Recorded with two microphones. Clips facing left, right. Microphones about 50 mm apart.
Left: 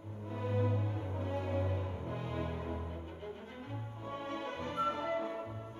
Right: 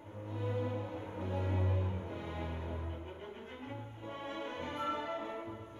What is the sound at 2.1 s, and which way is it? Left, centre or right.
Music, left.